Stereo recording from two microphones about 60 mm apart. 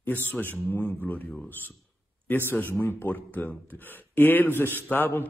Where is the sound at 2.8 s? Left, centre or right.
Left.